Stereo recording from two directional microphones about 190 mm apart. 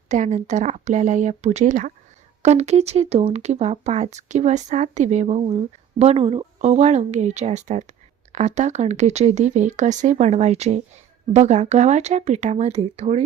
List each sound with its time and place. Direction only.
0.1 s speech: 40° right (ahead or behind)